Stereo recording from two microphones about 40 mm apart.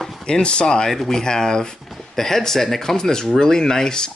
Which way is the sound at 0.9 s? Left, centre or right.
Centre.